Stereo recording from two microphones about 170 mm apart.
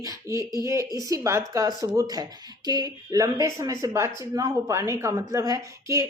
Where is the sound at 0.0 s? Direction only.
20° right (ahead or behind).